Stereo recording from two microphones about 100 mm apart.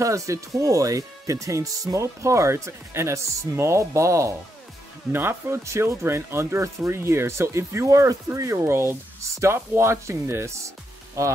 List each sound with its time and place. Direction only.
0.0 s speech: 30° right (ahead or behind)